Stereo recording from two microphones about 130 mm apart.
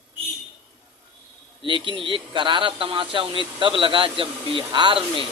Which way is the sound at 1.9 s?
40° right (ahead or behind).